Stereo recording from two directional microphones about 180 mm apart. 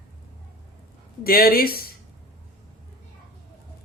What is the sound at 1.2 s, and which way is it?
Speech, 55° left (ahead or behind).